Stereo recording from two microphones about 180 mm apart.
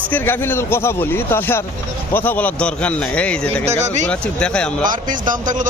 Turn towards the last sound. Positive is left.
turn(degrees=-45)  # may be behind; listen again after turning